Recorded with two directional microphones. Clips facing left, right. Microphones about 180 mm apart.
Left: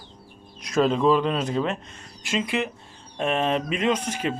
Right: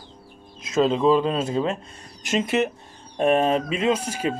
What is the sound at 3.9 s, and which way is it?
Speech, 10° right (ahead or behind).